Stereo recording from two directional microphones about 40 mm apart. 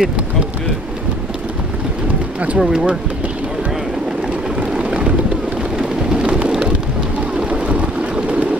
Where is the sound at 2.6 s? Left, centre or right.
Centre.